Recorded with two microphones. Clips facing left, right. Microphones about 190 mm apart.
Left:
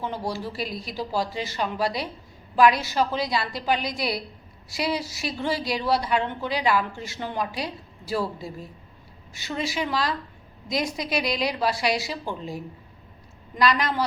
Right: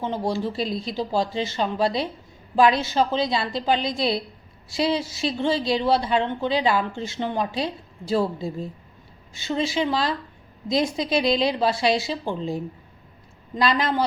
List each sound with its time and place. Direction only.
0.0 s a woman's voice: 25° right (ahead or behind)